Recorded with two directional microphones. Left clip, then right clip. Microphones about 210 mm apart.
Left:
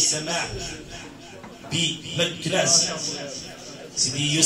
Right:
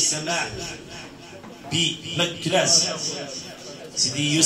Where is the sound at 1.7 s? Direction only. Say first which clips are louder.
Right 2 dB; 25° right (ahead or behind).